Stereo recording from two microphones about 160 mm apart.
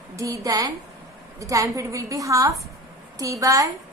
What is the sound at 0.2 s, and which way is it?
A woman's voice, 20° right (ahead or behind).